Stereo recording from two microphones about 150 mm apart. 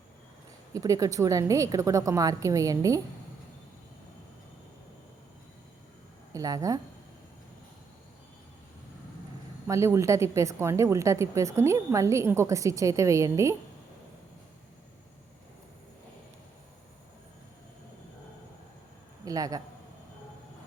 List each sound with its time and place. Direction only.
0.7 s a woman's voice: 25° right (ahead or behind)
6.3 s a woman's voice: 25° right (ahead or behind)
9.6 s a woman's voice: 20° right (ahead or behind)
19.2 s a man's voice: 25° right (ahead or behind)